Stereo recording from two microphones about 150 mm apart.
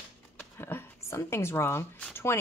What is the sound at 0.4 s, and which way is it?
A woman's voice, 15° left (ahead or behind).